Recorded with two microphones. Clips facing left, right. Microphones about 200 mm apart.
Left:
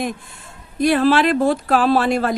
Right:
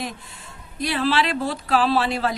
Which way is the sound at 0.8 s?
50° left (ahead or behind).